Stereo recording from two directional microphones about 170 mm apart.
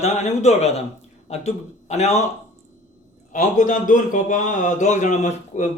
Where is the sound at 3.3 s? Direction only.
50° left (ahead or behind).